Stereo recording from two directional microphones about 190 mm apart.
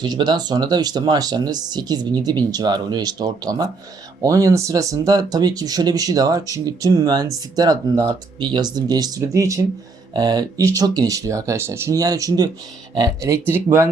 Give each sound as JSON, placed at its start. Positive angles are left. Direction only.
{"t": 0.0, "sound": "speech", "side_deg": -25}